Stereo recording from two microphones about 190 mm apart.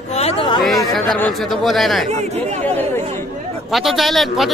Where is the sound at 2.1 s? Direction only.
35° right (ahead or behind).